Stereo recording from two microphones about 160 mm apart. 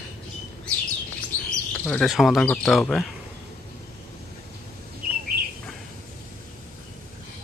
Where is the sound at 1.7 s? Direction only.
5° left (ahead or behind).